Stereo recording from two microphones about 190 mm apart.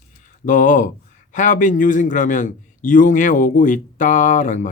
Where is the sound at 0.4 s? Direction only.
45° left (ahead or behind).